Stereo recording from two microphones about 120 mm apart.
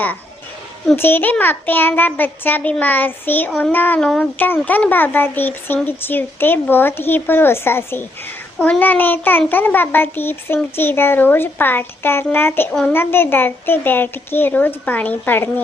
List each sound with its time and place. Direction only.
0.9 s speech: 20° left (ahead or behind)